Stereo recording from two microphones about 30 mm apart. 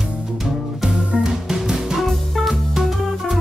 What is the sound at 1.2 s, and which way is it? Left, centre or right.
Music, centre.